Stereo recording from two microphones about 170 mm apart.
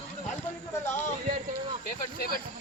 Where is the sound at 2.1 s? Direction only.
60° left (ahead or behind).